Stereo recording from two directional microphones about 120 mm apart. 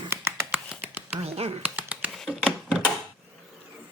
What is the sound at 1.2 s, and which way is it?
Speech, 55° right (ahead or behind).